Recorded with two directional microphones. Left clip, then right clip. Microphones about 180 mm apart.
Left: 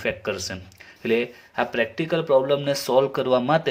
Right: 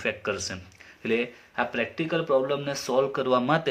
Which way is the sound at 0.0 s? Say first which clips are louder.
Left 2 dB; 30° left (ahead or behind).